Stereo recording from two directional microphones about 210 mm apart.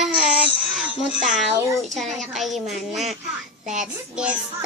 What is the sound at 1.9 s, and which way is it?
A child's voice, centre (ahead or behind).